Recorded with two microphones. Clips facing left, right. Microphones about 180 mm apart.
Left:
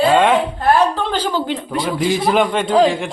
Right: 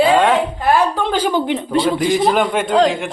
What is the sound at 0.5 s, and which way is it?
Speech, 10° right (ahead or behind).